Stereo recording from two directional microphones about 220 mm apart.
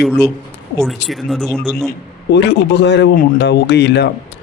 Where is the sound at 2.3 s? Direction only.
50° left (ahead or behind).